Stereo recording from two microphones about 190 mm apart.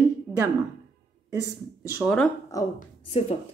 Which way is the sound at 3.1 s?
30° left (ahead or behind).